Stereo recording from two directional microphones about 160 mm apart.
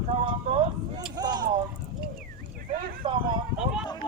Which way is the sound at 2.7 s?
60° right (ahead or behind).